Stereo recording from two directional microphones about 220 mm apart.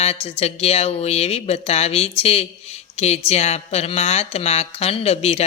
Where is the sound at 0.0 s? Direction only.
30° left (ahead or behind).